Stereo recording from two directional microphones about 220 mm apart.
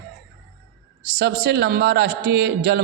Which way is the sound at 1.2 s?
50° right (ahead or behind).